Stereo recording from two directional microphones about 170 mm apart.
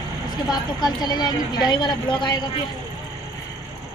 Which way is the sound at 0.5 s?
25° left (ahead or behind).